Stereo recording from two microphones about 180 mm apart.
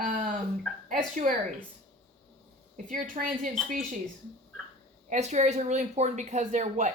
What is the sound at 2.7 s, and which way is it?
Speech, 45° right (ahead or behind).